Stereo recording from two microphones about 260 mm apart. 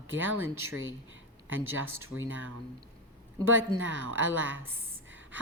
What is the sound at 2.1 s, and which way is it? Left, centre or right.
Speech, right.